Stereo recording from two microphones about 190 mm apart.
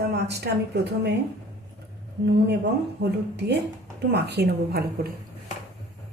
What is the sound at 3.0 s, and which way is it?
A woman's voice, 65° right (ahead or behind).